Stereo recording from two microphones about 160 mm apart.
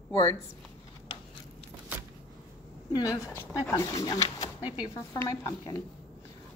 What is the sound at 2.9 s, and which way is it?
Speech, 20° left (ahead or behind).